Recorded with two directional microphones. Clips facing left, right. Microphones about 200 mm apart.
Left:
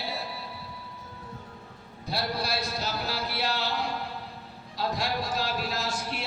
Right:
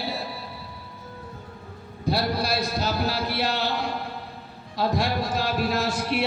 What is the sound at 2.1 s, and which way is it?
Speech, 65° right (ahead or behind).